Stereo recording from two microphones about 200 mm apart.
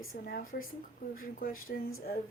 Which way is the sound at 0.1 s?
50° left (ahead or behind).